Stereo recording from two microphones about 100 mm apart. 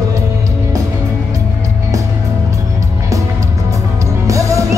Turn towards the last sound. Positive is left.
turn(degrees=-30)  # may be behind; listen again after turning